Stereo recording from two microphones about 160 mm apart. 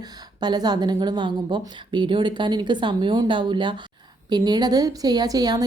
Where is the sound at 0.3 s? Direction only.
25° right (ahead or behind).